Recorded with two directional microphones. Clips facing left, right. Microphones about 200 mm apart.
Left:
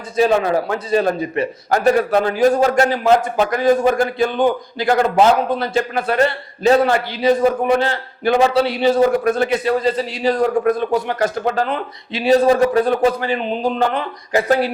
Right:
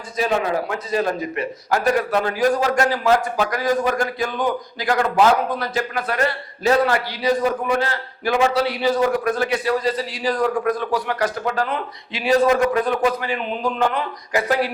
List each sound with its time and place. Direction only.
0.2 s a man's voice: 30° left (ahead or behind)